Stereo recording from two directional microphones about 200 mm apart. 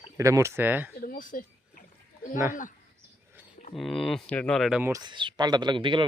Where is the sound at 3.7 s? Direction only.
Centre (ahead or behind).